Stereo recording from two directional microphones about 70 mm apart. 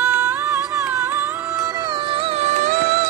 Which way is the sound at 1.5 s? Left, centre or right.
Right.